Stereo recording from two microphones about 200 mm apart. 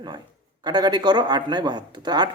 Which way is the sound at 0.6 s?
20° right (ahead or behind).